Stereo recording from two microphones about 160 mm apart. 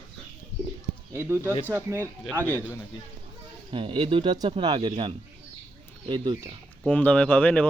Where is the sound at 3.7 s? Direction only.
30° right (ahead or behind).